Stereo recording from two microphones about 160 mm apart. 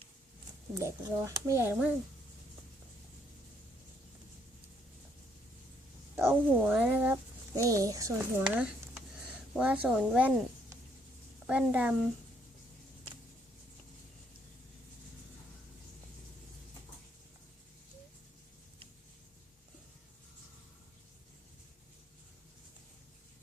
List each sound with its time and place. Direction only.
0.7 s speech: 20° right (ahead or behind)
6.1 s speech: 15° right (ahead or behind)
7.5 s speech: 20° right (ahead or behind)
9.6 s speech: 10° right (ahead or behind)
11.4 s speech: 5° right (ahead or behind)